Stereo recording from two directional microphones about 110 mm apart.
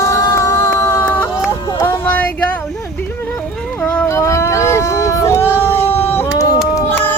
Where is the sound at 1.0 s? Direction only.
10° left (ahead or behind).